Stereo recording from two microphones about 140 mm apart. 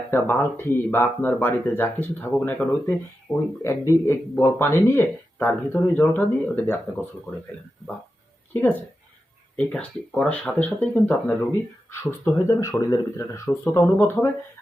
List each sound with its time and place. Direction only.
0.1 s speech: 15° left (ahead or behind)
8.5 s speech: 15° left (ahead or behind)
11.9 s speech: 20° left (ahead or behind)